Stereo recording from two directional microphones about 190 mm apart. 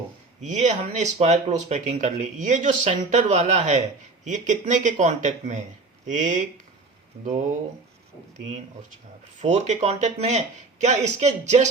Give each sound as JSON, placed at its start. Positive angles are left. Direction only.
{"t": 0.4, "sound": "speech", "side_deg": -40}
{"t": 9.4, "sound": "speech", "side_deg": -35}